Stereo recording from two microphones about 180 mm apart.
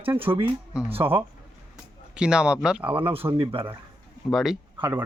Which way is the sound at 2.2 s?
5° right (ahead or behind).